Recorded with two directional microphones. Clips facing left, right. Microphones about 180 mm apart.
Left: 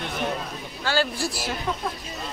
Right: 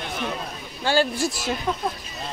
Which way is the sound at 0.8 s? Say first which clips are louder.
Right 4 dB; 20° right (ahead or behind).